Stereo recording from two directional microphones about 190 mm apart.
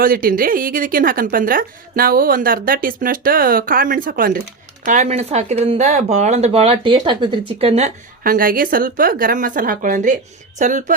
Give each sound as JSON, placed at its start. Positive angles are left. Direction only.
{"t": 0.0, "sound": "a woman's voice", "side_deg": -50}
{"t": 4.9, "sound": "speech", "side_deg": -40}
{"t": 8.2, "sound": "a woman's voice", "side_deg": -50}